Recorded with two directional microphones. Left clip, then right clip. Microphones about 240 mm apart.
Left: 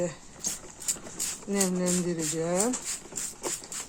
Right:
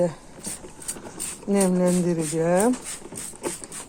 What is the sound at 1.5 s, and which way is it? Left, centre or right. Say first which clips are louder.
Speech: right 8 dB; right.